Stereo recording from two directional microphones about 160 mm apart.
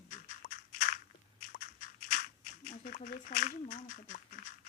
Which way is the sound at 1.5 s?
55° left (ahead or behind).